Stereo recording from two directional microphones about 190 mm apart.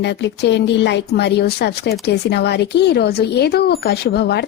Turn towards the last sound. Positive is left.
turn(degrees=60)  # may be behind; listen again after turning